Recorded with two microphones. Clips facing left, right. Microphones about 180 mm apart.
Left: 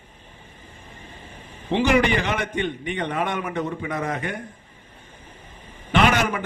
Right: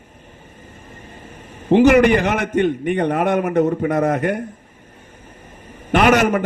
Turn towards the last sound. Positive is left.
turn(degrees=-50)  # may be behind; listen again after turning